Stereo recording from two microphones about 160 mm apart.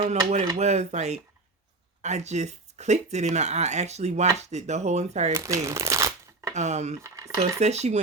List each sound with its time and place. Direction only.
0.5 s speech: 45° right (ahead or behind)
5.3 s crumpling: 20° right (ahead or behind)
6.5 s speech: 45° right (ahead or behind)
7.0 s speech: 20° right (ahead or behind)
7.6 s speech: 45° right (ahead or behind)